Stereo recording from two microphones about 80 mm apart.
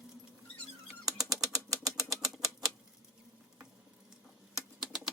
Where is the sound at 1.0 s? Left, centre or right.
Right.